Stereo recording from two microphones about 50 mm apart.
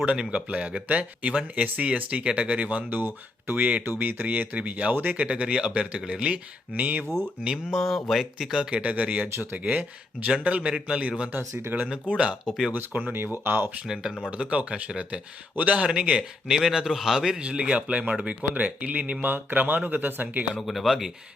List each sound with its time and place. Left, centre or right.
0.0 s a man's voice: right
5.2 s a man's voice: right
6.7 s speech: right
7.5 s speech: centre
8.7 s a man's voice: right
11.3 s speech: right
11.7 s a man's voice: centre
12.7 s a man's voice: right
13.1 s speech: right
13.8 s speech: centre
14.3 s a man's voice: right
20.6 s speech: centre